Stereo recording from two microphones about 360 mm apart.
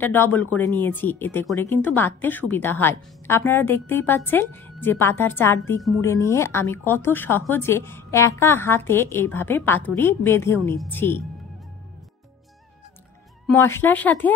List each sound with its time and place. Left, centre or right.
0.0 s speech: centre
13.5 s speech: centre